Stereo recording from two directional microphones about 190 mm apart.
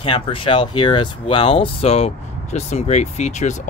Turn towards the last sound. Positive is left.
turn(degrees=40)  # may be behind; listen again after turning